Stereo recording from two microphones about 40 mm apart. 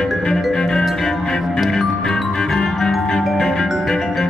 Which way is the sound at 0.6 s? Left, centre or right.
Centre.